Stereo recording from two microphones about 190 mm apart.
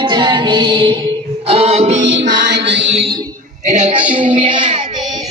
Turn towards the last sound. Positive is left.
turn(degrees=-5)  # may be behind; listen again after turning